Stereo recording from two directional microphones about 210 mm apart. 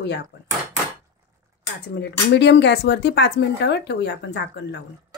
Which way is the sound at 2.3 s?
55° left (ahead or behind).